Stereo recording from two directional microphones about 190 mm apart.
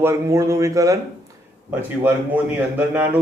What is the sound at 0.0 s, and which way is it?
Speech, 15° right (ahead or behind).